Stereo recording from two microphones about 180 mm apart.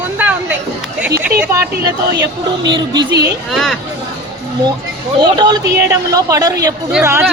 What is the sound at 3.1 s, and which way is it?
Speech, 65° right (ahead or behind).